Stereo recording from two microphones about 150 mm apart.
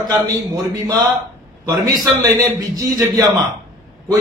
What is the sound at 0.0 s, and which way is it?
Speech, 25° right (ahead or behind).